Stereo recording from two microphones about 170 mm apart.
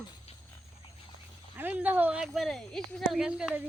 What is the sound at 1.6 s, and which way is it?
Speech, 10° right (ahead or behind).